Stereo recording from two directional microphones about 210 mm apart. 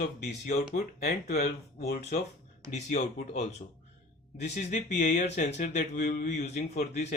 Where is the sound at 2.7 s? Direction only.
35° left (ahead or behind).